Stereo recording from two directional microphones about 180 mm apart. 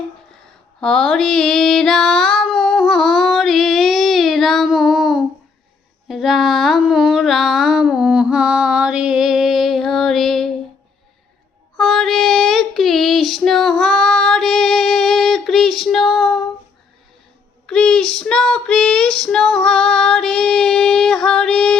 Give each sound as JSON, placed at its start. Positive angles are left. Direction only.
{"t": 0.8, "sound": "child singing", "side_deg": 5}
{"t": 6.1, "sound": "a sound", "side_deg": 0}
{"t": 11.8, "sound": "child singing", "side_deg": 0}
{"t": 17.7, "sound": "child singing", "side_deg": 5}